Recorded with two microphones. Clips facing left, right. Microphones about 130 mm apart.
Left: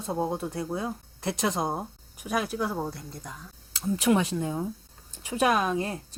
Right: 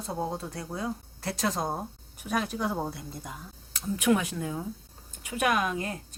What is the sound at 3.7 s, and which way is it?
A woman's voice, 30° left (ahead or behind).